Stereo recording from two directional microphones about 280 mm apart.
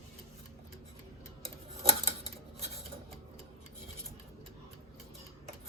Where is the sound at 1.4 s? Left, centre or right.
Right.